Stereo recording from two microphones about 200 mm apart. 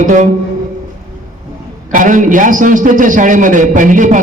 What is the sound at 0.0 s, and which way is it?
Speech, 40° right (ahead or behind).